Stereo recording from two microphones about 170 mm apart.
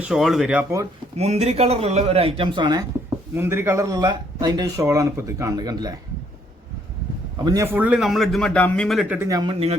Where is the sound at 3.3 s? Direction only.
15° right (ahead or behind).